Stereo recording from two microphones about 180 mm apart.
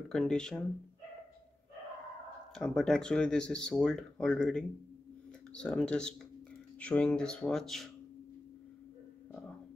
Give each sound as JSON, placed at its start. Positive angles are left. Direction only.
{"t": 0.1, "sound": "speech", "side_deg": 5}
{"t": 2.5, "sound": "speech", "side_deg": 5}